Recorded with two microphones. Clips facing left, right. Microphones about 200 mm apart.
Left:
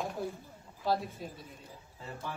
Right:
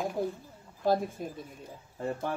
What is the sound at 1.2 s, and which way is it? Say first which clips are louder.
Speech: right 5 dB; 50° right (ahead or behind).